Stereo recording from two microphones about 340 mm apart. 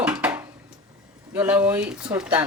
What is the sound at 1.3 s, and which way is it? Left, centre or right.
A woman's voice, centre.